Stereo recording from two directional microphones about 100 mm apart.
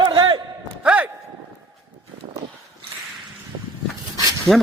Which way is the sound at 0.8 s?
10° right (ahead or behind).